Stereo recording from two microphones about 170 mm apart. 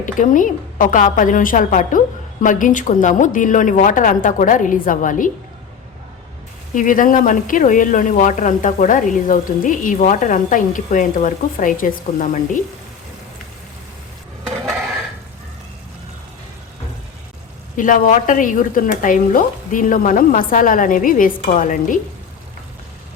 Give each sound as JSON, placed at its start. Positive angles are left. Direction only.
{"t": 0.0, "sound": "speech", "side_deg": 50}
{"t": 6.7, "sound": "speech", "side_deg": 50}
{"t": 17.7, "sound": "speech", "side_deg": 50}